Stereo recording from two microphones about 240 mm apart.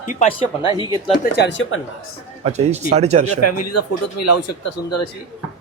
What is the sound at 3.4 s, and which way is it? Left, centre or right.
Speech, left.